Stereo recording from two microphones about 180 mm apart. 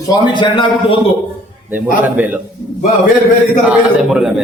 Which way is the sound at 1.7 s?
10° right (ahead or behind).